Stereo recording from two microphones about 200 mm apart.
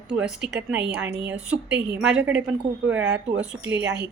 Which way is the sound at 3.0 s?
60° right (ahead or behind).